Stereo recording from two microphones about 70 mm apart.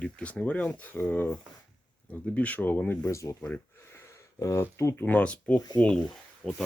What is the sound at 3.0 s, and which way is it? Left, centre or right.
Speech, left.